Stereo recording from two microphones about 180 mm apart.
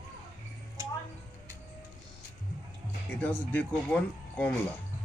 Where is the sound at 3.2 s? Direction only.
10° left (ahead or behind).